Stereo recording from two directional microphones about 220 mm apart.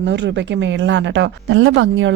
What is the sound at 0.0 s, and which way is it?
A woman's voice, 55° right (ahead or behind).